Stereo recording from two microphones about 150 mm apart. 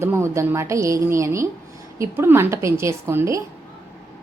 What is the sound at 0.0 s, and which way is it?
A woman's voice, 20° right (ahead or behind).